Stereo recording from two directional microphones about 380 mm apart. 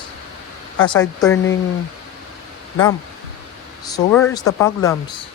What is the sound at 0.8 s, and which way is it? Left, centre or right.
Speech, centre.